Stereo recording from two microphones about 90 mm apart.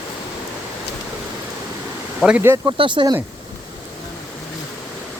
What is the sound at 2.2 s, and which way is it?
Speech, 10° right (ahead or behind).